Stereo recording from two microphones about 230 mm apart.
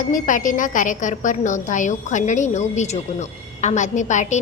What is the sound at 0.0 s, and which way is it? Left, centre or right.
A woman's voice, left.